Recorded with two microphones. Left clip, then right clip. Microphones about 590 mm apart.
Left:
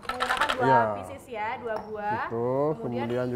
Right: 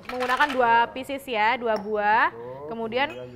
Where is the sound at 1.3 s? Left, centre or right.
Right.